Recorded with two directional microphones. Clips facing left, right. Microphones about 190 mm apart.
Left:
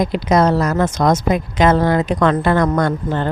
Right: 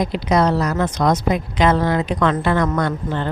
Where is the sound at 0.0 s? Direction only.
45° left (ahead or behind).